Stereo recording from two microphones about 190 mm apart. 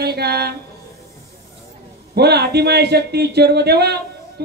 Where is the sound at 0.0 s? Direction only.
60° right (ahead or behind).